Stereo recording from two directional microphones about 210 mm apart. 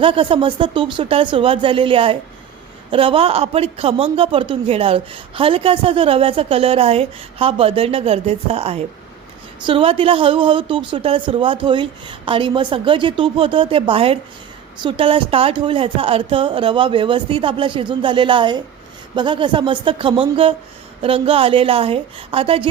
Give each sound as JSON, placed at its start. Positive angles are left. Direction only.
{"t": 0.0, "sound": "speech", "side_deg": -25}